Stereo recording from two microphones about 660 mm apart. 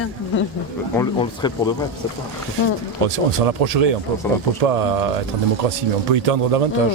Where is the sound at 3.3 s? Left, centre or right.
Right.